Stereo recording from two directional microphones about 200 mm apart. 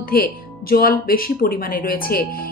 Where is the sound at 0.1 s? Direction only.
45° left (ahead or behind).